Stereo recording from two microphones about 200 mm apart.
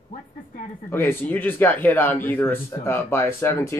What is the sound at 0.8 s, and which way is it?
A man's voice, 10° left (ahead or behind).